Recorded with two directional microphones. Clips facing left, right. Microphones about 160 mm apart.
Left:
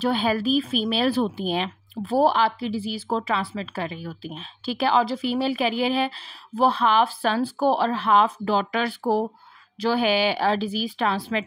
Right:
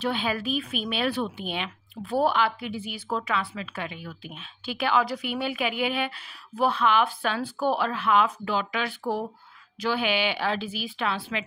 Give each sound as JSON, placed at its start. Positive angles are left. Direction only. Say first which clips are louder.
{"t": 0.0, "sound": "speech", "louder": "left 5 dB", "side_deg": 40}